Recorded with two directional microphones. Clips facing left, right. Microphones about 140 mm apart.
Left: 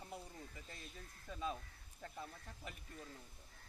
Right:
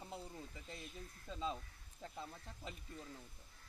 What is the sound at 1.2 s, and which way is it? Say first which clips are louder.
Speech: right 1 dB; 20° right (ahead or behind).